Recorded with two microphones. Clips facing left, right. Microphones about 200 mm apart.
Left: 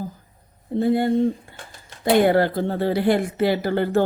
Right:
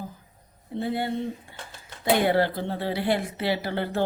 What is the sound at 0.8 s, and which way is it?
Speech, 45° left (ahead or behind).